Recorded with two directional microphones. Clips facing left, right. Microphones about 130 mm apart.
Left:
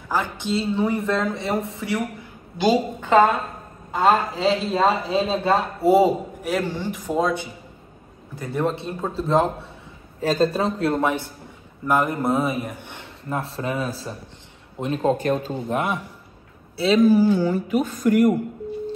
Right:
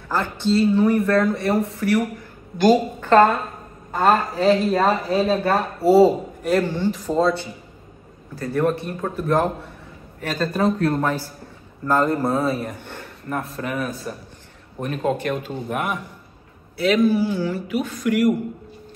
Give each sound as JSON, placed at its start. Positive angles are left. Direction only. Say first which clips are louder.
{"t": 0.1, "sound": "a woman's voice", "louder": "right 3 dB", "side_deg": 15}
{"t": 11.0, "sound": "speech", "louder": "left 1 dB", "side_deg": 15}
{"t": 13.0, "sound": "speech", "louder": "even", "side_deg": 25}
{"t": 17.5, "sound": "speech", "louder": "left 3 dB", "side_deg": 45}